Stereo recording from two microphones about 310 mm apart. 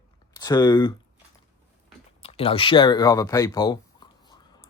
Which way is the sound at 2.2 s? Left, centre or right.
Centre.